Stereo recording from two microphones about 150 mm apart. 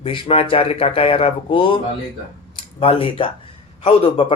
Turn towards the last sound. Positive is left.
turn(degrees=40)  # may be behind; listen again after turning